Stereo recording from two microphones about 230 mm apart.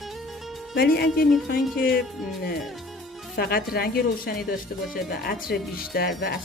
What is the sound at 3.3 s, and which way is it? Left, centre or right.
Speech, left.